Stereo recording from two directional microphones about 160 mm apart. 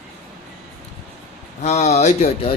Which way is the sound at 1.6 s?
45° left (ahead or behind).